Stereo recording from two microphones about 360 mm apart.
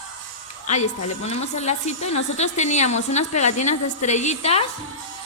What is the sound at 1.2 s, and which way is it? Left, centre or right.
A woman's voice, centre.